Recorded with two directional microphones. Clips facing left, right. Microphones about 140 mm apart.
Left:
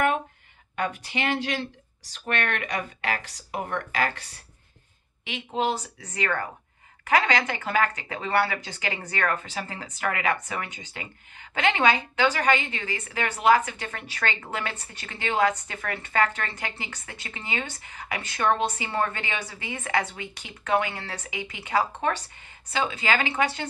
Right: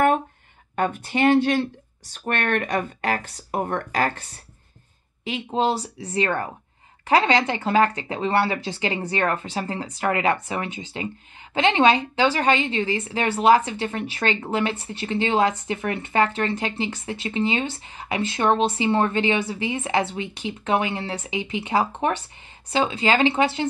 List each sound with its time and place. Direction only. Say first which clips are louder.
0.7 s speech: right 6 dB; 45° right (ahead or behind)
5.2 s a woman's voice: right 4 dB; 35° right (ahead or behind)